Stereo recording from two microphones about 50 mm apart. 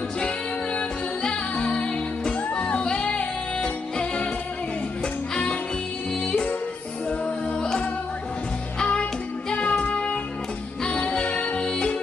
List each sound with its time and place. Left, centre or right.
0.7 s music: left
5.3 s music: centre
9.5 s music: left